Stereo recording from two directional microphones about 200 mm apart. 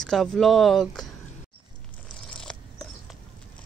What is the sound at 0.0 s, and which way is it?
Speech, centre (ahead or behind).